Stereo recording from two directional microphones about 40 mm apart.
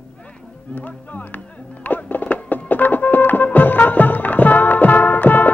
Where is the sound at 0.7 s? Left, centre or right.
Left.